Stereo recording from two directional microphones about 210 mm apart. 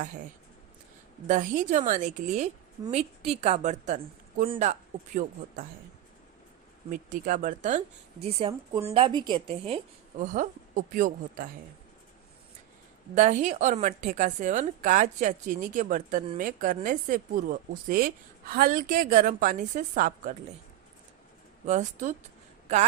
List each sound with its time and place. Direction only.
1.3 s speech: 40° right (ahead or behind)
6.9 s a woman's voice: 40° right (ahead or behind)
10.3 s speech: 40° right (ahead or behind)
13.1 s speech: 35° right (ahead or behind)
21.7 s speech: 35° right (ahead or behind)